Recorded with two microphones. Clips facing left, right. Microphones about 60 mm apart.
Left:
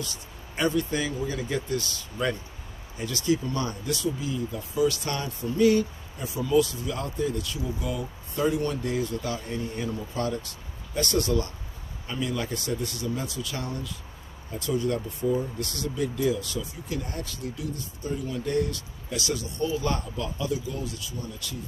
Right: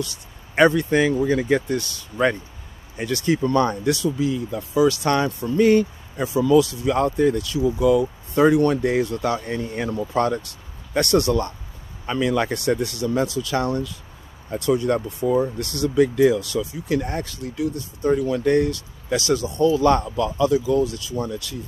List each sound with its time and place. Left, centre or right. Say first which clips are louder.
0.6 s speech: right 9 dB; right
3.9 s speech: right 7 dB; right
6.1 s speech: right 7 dB; right
7.0 s speech: right 11 dB; right
8.8 s speech: right 8 dB; right
10.1 s speech: right 9 dB; right
10.9 s speech: right 8 dB; right
12.1 s speech: right 9 dB; right
16.0 s speech: right 10 dB; right